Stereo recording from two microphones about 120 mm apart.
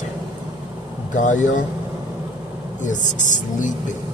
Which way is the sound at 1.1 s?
90° left.